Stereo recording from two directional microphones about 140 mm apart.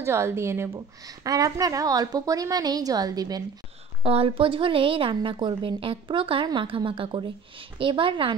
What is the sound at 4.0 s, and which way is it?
A woman's voice, 45° right (ahead or behind).